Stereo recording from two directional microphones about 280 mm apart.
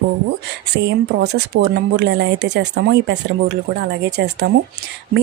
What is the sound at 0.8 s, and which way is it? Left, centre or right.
Speech, right.